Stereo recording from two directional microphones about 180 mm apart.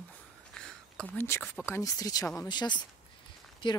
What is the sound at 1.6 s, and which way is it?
Speech, 15° left (ahead or behind).